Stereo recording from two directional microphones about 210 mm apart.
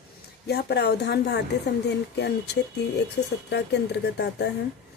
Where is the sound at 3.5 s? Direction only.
55° left (ahead or behind).